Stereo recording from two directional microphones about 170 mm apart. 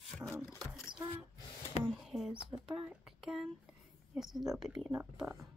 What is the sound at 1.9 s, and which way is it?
A woman's voice, centre (ahead or behind).